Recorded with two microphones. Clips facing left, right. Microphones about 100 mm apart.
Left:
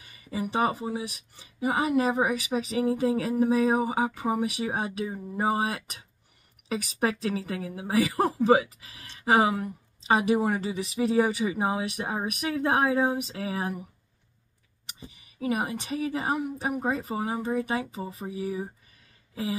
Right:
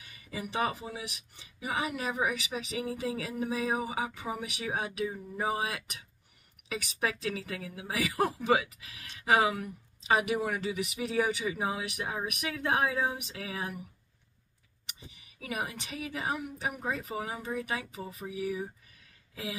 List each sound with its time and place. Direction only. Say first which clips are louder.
0.0 s a woman's voice: left 7 dB; 40° left (ahead or behind)
14.9 s a woman's voice: left 5 dB; 35° left (ahead or behind)